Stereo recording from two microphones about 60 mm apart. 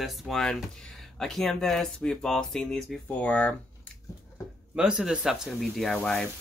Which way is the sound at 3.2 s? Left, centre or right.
Left.